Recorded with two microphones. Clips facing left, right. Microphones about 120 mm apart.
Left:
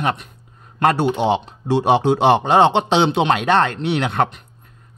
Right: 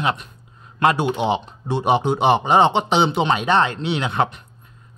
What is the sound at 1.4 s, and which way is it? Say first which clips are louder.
A man's voice: left 3 dB; 90° left.